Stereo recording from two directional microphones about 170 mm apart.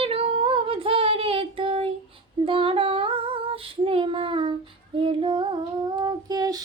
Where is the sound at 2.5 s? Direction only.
30° right (ahead or behind).